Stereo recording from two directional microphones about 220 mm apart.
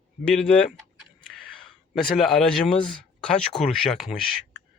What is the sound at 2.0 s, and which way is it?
Speech, centre (ahead or behind).